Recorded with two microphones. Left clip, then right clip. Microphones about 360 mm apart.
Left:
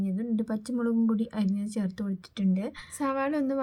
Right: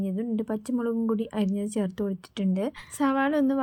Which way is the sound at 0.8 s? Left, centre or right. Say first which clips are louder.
Left 1 dB; right.